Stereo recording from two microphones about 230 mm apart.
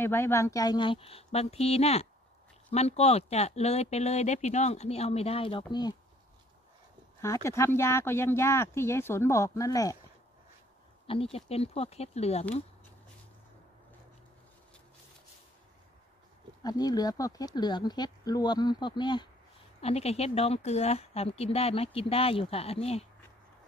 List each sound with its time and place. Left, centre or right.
0.0 s speech: centre
7.2 s speech: centre
11.3 s speech: left
16.6 s speech: centre